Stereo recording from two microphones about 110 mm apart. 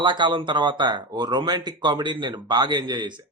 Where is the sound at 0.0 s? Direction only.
45° right (ahead or behind).